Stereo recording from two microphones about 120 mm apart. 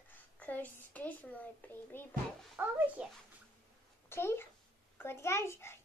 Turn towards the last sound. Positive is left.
turn(degrees=20)  # may be behind; listen again after turning